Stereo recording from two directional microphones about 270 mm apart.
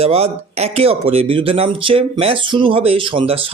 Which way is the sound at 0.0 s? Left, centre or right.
Right.